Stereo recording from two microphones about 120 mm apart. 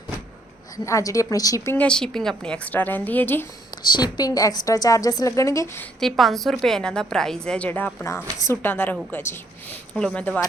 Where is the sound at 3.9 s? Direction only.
35° left (ahead or behind).